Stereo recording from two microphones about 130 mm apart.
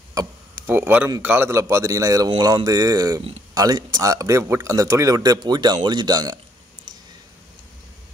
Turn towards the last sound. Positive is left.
turn(degrees=-30)  # may be behind; listen again after turning